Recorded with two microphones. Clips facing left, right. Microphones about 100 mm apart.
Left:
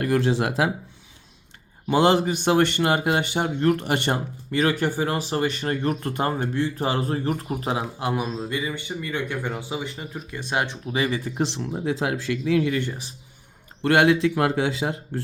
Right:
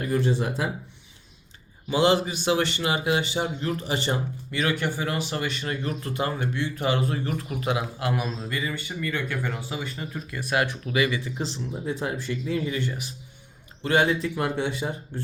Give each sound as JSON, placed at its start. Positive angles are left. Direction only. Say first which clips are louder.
{"t": 0.0, "sound": "speech", "louder": "left 3 dB", "side_deg": 85}
{"t": 1.9, "sound": "speech", "louder": "left 3 dB", "side_deg": 50}
{"t": 4.5, "sound": "speech", "louder": "left 4 dB", "side_deg": 40}
{"t": 11.3, "sound": "speech", "louder": "left 6 dB", "side_deg": 70}
{"t": 11.9, "sound": "speech", "louder": "left 4 dB", "side_deg": 90}
{"t": 13.8, "sound": "speech", "louder": "left 5 dB", "side_deg": 65}